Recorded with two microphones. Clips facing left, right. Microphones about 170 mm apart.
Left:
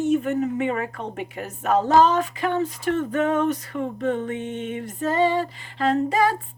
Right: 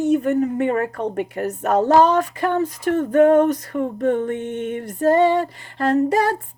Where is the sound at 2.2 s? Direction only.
45° right (ahead or behind); by 4.8 s 65° right (ahead or behind).